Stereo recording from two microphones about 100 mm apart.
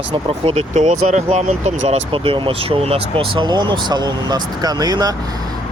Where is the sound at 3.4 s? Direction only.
45° right (ahead or behind).